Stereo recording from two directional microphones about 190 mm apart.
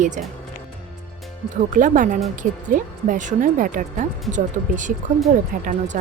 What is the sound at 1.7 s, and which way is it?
Speech, 45° right (ahead or behind).